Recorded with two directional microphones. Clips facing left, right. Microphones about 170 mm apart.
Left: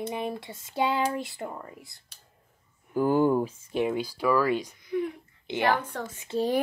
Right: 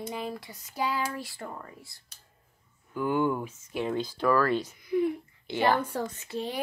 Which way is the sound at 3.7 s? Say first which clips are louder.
Left 3 dB; 10° left (ahead or behind).